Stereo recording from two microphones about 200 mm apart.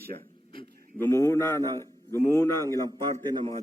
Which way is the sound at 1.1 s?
15° left (ahead or behind).